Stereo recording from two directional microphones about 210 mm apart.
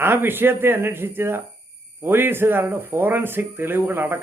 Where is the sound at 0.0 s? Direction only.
10° right (ahead or behind).